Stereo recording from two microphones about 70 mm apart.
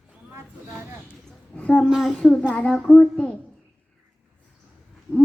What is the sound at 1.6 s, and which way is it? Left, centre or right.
A child's voice, centre.